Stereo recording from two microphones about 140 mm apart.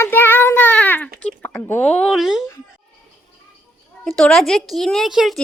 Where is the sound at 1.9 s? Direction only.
5° left (ahead or behind).